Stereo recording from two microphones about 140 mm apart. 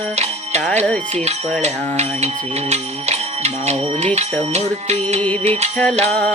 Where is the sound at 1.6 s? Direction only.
50° right (ahead or behind).